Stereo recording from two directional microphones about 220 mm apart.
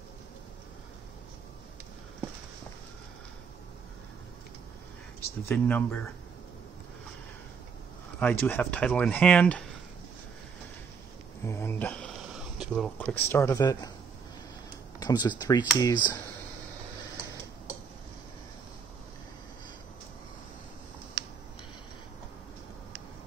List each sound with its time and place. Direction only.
5.2 s speech: 10° left (ahead or behind)
8.2 s speech: 5° left (ahead or behind)
11.4 s a sound: 10° left (ahead or behind)
12.9 s speech: 10° left (ahead or behind)
15.0 s speech: 20° left (ahead or behind)